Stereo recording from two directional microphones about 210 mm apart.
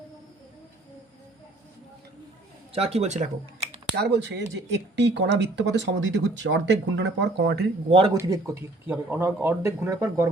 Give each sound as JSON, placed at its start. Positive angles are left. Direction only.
{"t": 2.7, "sound": "a man's voice", "side_deg": -30}
{"t": 3.9, "sound": "speech", "side_deg": -55}
{"t": 7.9, "sound": "speech", "side_deg": -25}
{"t": 8.1, "sound": "speech", "side_deg": -15}